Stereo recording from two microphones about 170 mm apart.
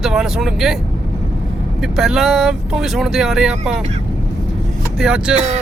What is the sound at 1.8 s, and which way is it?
Speech, centre (ahead or behind).